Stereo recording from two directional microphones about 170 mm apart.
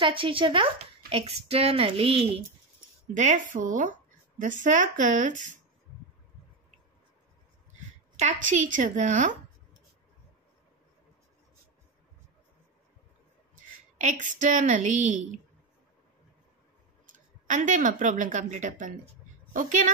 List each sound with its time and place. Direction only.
0.0 s a child's voice: 30° right (ahead or behind)
3.2 s a woman's voice: 50° right (ahead or behind)
8.2 s a woman's voice: 45° right (ahead or behind)
14.0 s a woman's voice: 50° right (ahead or behind)
17.5 s a woman's voice: 45° right (ahead or behind)